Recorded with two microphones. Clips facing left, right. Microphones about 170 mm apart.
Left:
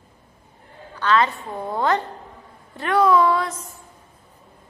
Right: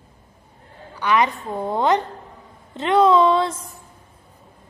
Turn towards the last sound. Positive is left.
turn(degrees=-25)  # may be behind; listen again after turning